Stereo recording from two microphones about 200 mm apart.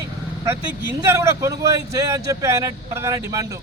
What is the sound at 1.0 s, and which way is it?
A man's voice, 15° right (ahead or behind).